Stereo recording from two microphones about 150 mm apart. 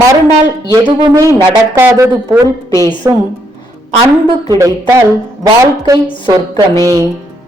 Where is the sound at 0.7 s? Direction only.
25° right (ahead or behind).